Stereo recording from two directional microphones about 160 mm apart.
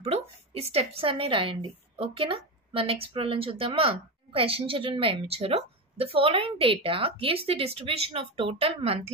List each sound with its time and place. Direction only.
0.0 s a woman's voice: 40° right (ahead or behind)